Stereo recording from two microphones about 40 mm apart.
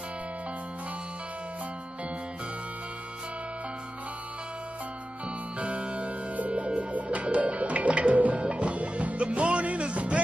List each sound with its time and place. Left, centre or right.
5.6 s music: right